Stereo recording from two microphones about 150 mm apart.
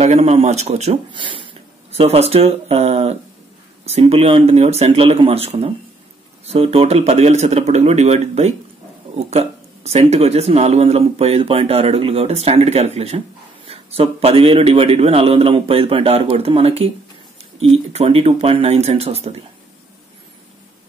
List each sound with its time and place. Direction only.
0.0 s speech: 45° right (ahead or behind)
1.1 s a man's voice: 35° right (ahead or behind)
17.9 s speech: 40° right (ahead or behind)